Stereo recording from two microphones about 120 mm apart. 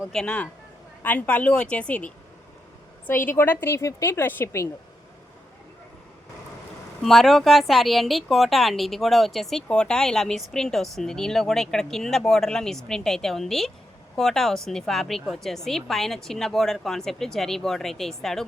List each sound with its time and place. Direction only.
0.1 s a woman's voice: 5° left (ahead or behind)
3.3 s a woman's voice: 15° left (ahead or behind)
7.0 s speech: centre (ahead or behind)